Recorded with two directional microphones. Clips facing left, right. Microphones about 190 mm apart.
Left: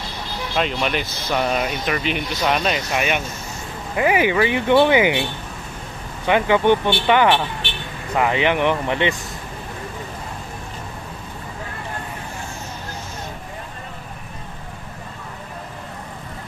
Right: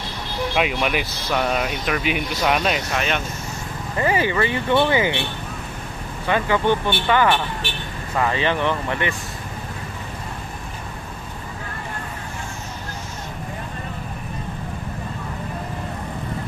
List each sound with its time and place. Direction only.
0.6 s speech: 10° right (ahead or behind)
2.9 s speech: 10° left (ahead or behind)
6.2 s speech: 15° left (ahead or behind)